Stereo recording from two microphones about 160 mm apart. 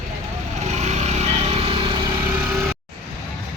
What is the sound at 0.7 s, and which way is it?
Vehicle, 45° right (ahead or behind).